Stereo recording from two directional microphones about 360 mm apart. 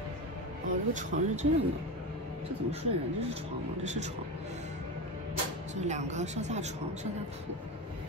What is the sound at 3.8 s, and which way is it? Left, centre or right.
Speech, centre.